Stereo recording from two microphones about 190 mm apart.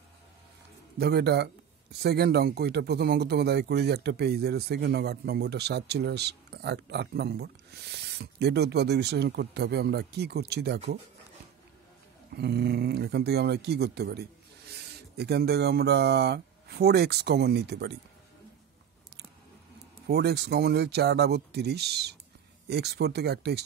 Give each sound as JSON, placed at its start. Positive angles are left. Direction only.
{"t": 0.9, "sound": "speech", "side_deg": -55}
{"t": 12.3, "sound": "speech", "side_deg": -60}
{"t": 20.1, "sound": "speech", "side_deg": -60}